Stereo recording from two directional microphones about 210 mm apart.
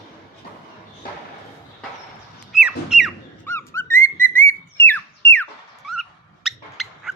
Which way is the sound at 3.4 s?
10° left (ahead or behind).